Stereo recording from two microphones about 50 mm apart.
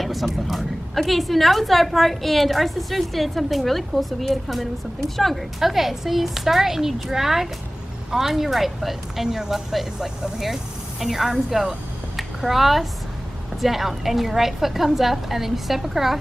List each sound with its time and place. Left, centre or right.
0.0 s a woman's voice: centre